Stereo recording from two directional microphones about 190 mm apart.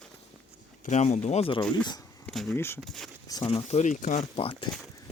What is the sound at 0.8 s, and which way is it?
Speech, 40° left (ahead or behind).